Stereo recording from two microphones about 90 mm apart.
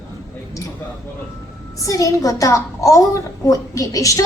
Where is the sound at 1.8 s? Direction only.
40° left (ahead or behind).